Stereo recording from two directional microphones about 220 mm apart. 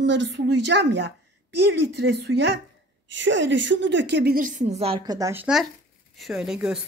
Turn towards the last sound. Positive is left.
turn(degrees=0)  # may be behind; listen again after turning